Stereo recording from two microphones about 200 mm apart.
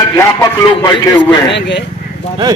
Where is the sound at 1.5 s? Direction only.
60° left (ahead or behind).